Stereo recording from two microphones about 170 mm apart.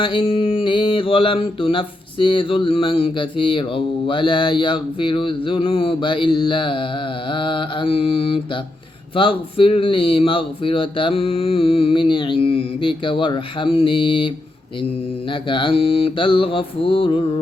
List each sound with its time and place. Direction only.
0.0 s mantra: 30° left (ahead or behind)
7.3 s speech: 30° left (ahead or behind)